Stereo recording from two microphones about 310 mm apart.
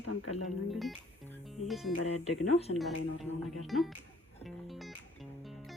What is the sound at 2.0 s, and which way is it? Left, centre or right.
Speech, left.